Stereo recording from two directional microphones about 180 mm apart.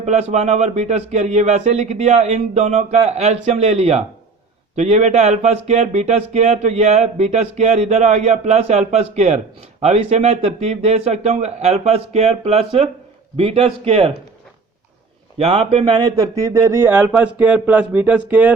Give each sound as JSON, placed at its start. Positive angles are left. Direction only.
{"t": 0.0, "sound": "a man's voice", "side_deg": -40}
{"t": 15.4, "sound": "speech", "side_deg": -35}